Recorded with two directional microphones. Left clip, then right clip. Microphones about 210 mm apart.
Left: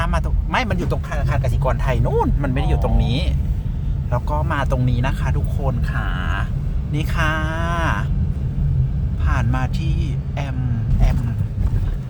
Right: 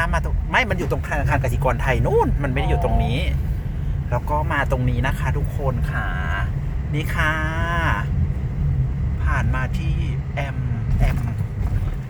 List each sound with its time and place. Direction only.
0.0 s speech: 5° left (ahead or behind)
1.1 s speech: 10° right (ahead or behind); by 8.0 s 10° left (ahead or behind)